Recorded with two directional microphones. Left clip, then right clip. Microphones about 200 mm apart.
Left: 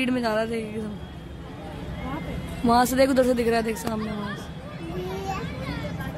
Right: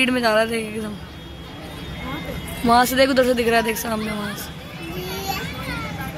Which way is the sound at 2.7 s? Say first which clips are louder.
Right 4 dB; 5° left (ahead or behind).